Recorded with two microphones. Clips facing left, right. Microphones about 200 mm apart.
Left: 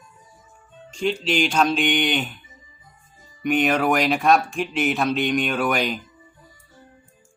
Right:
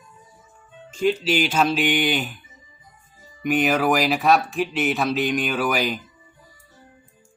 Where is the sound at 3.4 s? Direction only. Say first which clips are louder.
Even; 5° right (ahead or behind).